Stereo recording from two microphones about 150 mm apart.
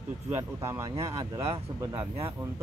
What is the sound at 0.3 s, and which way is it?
Speech, 20° right (ahead or behind).